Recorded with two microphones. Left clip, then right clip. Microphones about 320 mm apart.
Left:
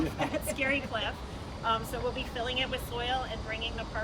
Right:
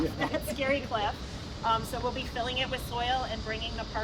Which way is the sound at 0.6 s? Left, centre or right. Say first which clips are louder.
Right 2 dB; centre.